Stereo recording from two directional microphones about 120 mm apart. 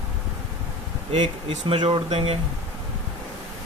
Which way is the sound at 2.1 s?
55° right (ahead or behind).